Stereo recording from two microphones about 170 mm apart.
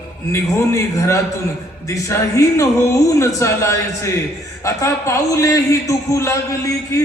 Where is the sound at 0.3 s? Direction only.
15° left (ahead or behind).